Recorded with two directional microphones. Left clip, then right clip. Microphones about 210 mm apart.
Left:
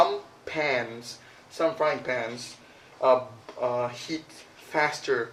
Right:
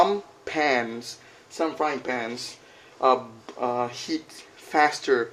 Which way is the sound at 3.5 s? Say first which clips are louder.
Right 1 dB; 45° right (ahead or behind).